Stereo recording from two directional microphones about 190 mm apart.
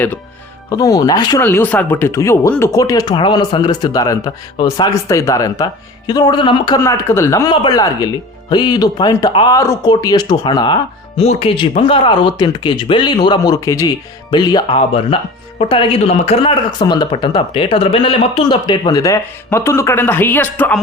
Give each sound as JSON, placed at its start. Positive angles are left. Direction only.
{"t": 0.7, "sound": "speech", "side_deg": 20}